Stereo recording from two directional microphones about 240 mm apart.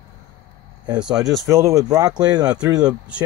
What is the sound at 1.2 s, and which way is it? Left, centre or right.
Speech, centre.